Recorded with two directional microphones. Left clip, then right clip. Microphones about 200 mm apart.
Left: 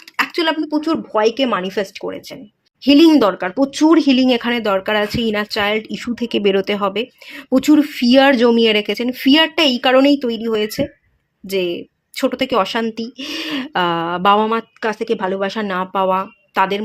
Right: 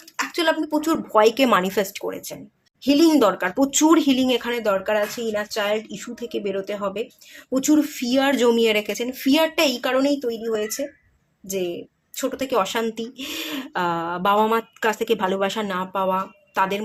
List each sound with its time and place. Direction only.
0.2 s speech: 35° left (ahead or behind); by 2.0 s 10° left (ahead or behind)
2.0 s speech: 25° left (ahead or behind); by 7.8 s 45° left (ahead or behind)
7.8 s speech: 30° left (ahead or behind)
8.4 s speech: 20° left (ahead or behind)